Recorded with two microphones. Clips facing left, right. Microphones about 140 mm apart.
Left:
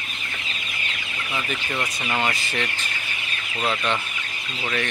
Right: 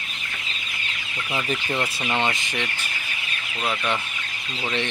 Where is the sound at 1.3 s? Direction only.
25° right (ahead or behind).